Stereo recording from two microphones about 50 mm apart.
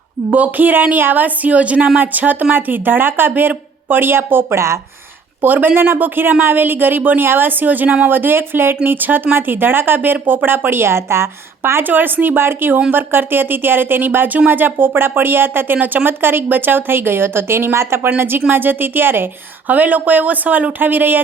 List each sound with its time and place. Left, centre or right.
0.3 s a woman's voice: right
4.5 s speech: right
5.4 s a woman's voice: right
11.8 s a woman's voice: right